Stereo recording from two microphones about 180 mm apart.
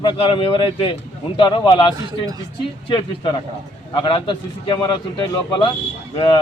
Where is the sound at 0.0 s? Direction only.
30° left (ahead or behind).